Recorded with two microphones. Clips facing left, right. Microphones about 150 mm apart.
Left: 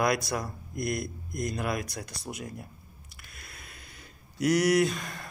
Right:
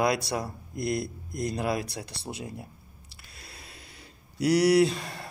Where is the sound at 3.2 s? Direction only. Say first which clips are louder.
Right 1 dB; 30° right (ahead or behind).